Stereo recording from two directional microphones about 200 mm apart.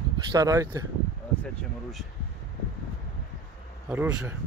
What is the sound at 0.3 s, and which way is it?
Speech, 20° right (ahead or behind).